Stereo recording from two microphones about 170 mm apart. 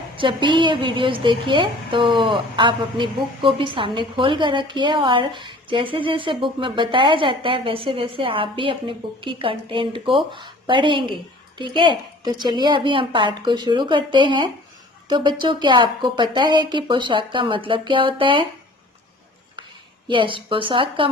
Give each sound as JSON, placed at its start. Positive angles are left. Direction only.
{"t": 0.2, "sound": "a woman's voice", "side_deg": -30}
{"t": 20.1, "sound": "a woman's voice", "side_deg": -30}